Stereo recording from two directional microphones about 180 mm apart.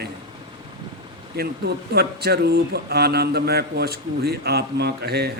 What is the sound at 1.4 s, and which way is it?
A man's voice, 65° right (ahead or behind).